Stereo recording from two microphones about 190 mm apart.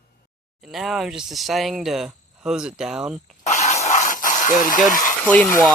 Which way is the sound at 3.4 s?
35° left (ahead or behind).